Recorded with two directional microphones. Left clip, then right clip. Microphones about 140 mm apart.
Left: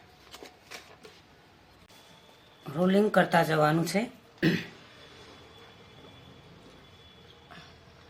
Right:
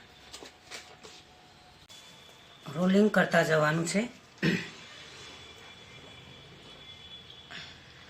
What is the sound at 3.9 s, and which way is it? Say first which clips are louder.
Speech: left 1 dB; 90° left.